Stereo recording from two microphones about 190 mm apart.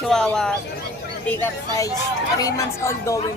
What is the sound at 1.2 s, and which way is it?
A woman's voice, 15° left (ahead or behind).